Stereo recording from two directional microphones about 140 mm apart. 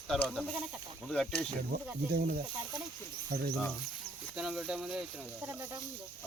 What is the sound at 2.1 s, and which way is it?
Speech, 90° right.